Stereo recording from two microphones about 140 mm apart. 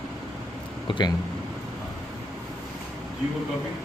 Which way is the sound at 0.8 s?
35° left (ahead or behind).